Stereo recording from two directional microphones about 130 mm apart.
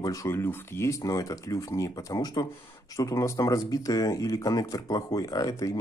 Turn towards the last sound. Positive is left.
turn(degrees=25)  # may be behind; listen again after turning